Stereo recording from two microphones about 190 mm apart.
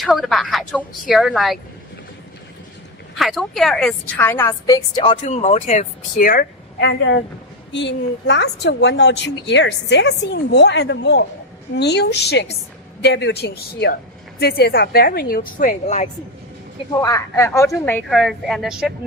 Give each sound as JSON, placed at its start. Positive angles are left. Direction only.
{"t": 0.0, "sound": "a woman's voice", "side_deg": 0}
{"t": 3.2, "sound": "a woman's voice", "side_deg": 0}
{"t": 4.2, "sound": "speech", "side_deg": 10}
{"t": 4.9, "sound": "speech", "side_deg": 35}
{"t": 6.8, "sound": "a woman's voice", "side_deg": 70}
{"t": 16.9, "sound": "speech", "side_deg": 20}
{"t": 18.1, "sound": "a woman's voice", "side_deg": 0}